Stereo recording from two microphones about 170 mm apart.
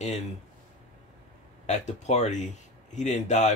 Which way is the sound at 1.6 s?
45° left (ahead or behind).